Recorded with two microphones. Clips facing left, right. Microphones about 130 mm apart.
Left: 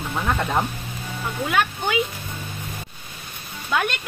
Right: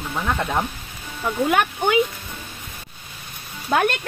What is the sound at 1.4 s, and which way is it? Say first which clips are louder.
Speech: right 2 dB; 55° right (ahead or behind).